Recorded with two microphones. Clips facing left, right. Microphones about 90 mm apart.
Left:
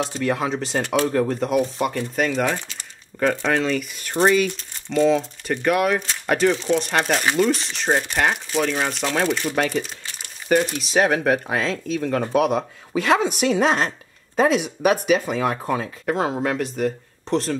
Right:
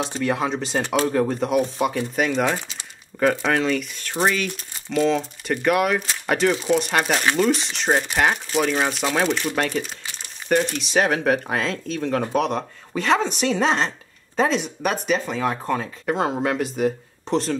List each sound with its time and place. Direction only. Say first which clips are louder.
0.2 s speech: right 1 dB; centre (ahead or behind)